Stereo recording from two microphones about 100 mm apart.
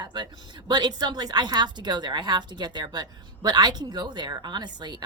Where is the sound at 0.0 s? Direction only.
50° right (ahead or behind).